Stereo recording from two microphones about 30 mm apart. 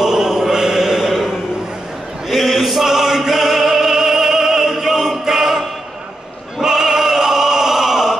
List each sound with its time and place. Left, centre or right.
0.0 s chant: centre
2.3 s male singing: centre
2.8 s opera: centre
5.2 s music: centre
6.6 s opera: centre